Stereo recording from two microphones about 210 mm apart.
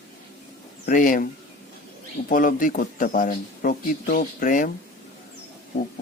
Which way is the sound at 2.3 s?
40° left (ahead or behind).